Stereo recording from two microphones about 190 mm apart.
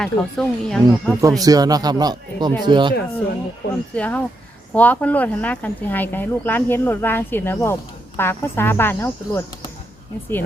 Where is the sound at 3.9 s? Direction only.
5° left (ahead or behind).